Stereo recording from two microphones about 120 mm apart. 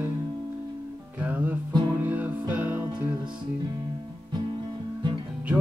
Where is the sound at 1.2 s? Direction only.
10° right (ahead or behind).